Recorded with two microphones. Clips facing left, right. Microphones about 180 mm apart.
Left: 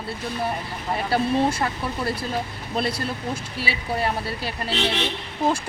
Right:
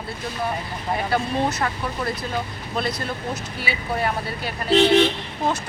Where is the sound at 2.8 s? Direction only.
30° left (ahead or behind).